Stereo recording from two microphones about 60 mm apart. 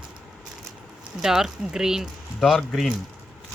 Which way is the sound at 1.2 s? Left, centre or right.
Centre.